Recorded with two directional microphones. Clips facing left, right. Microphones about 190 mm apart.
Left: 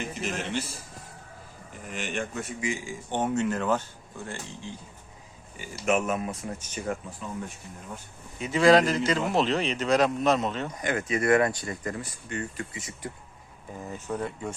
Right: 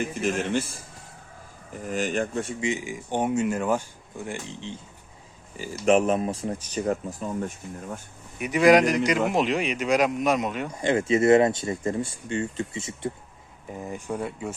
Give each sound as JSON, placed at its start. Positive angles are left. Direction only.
{"t": 0.1, "sound": "a man's voice", "side_deg": -50}
{"t": 1.9, "sound": "speech", "side_deg": -40}
{"t": 5.8, "sound": "speech", "side_deg": -30}
{"t": 8.4, "sound": "speech", "side_deg": -15}
{"t": 10.8, "sound": "speech", "side_deg": -25}
{"t": 13.9, "sound": "speech", "side_deg": -10}